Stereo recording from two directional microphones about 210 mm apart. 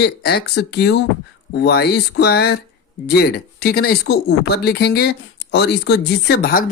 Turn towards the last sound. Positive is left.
turn(degrees=45)  # may be behind; listen again after turning